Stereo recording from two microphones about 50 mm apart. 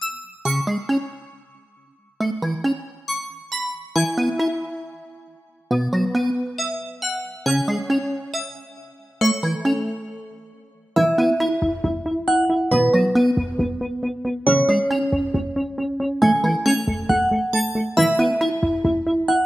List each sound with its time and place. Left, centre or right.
0.0 s music: centre
2.1 s music: centre
5.7 s music: centre
8.0 s music: centre
9.2 s music: centre
11.0 s music: centre